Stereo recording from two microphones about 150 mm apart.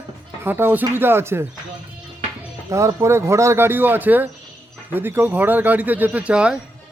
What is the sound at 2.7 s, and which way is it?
Speech, 20° right (ahead or behind).